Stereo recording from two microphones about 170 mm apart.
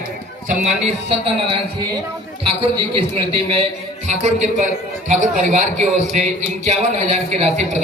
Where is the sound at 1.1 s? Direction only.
30° right (ahead or behind).